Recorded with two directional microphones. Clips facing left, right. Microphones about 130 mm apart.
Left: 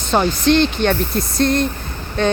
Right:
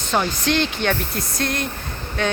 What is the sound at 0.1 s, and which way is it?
Speech, 30° left (ahead or behind).